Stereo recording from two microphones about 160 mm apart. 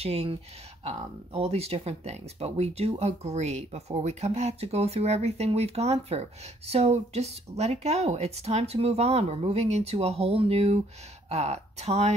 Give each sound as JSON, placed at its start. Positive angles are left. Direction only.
{"t": 0.0, "sound": "speech", "side_deg": -40}